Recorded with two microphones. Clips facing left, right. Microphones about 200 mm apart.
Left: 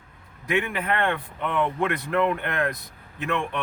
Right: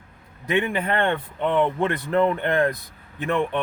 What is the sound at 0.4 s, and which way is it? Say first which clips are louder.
A man's voice: right 3 dB; 30° right (ahead or behind).